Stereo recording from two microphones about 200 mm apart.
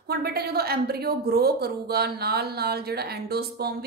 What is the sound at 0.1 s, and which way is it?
A woman's voice, 50° right (ahead or behind).